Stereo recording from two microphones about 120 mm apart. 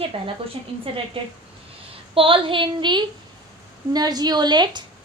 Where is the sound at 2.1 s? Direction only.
45° right (ahead or behind).